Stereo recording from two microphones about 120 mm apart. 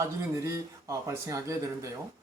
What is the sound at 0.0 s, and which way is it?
Speech, 25° right (ahead or behind).